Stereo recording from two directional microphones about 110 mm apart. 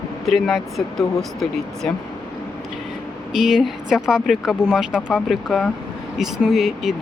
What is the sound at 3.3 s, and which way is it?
Speech, 5° right (ahead or behind).